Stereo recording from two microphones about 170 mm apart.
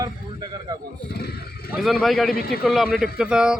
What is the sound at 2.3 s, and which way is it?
Speech, 60° left (ahead or behind).